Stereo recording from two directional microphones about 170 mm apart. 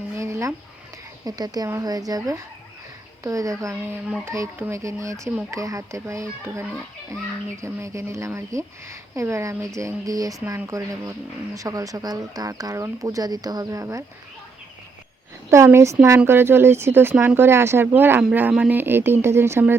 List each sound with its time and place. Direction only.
0.2 s a sound: 15° right (ahead or behind)
1.2 s speech: 20° right (ahead or behind)
15.4 s speech: 15° right (ahead or behind)